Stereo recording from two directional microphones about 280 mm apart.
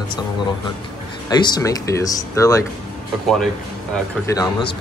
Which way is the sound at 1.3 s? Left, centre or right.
Centre.